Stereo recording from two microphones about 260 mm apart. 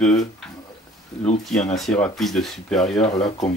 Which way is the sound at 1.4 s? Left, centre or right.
Centre.